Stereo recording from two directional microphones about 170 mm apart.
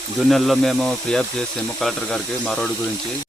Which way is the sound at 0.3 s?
Centre (ahead or behind).